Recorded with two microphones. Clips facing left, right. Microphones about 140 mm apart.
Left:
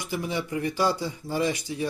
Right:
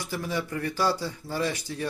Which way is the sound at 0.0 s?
15° left (ahead or behind).